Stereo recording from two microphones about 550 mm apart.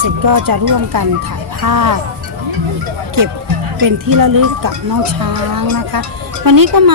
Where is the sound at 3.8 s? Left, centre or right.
Right.